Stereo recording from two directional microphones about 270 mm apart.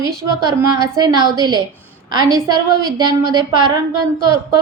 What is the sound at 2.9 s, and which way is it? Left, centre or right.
Speech, centre.